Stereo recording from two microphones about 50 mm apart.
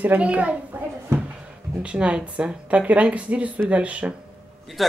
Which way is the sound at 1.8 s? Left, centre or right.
Right.